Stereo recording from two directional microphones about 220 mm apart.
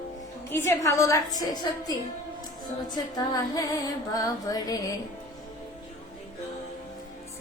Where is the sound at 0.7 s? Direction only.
15° left (ahead or behind).